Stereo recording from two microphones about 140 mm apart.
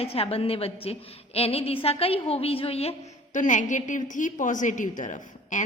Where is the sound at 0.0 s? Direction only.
45° left (ahead or behind).